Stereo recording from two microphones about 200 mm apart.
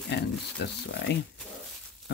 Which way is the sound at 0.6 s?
55° left (ahead or behind).